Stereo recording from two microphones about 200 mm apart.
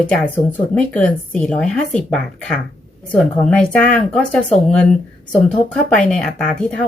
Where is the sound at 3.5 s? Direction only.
5° left (ahead or behind).